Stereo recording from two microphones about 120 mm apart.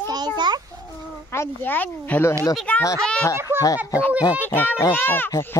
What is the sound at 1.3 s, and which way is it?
Speech, 20° left (ahead or behind).